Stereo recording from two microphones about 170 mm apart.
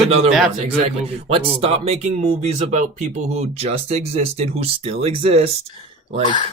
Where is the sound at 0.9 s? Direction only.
35° right (ahead or behind).